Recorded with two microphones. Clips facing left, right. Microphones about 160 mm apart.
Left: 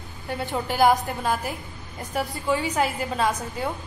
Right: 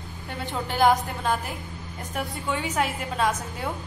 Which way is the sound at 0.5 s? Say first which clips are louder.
Left 1 dB; 5° left (ahead or behind).